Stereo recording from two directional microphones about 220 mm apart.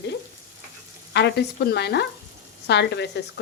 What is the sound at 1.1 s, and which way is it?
Frying, 50° left (ahead or behind).